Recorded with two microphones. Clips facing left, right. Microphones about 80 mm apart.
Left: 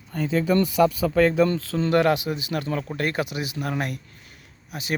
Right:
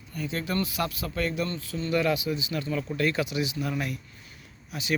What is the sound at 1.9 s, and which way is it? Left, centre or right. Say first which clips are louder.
Speech: left 5 dB; left.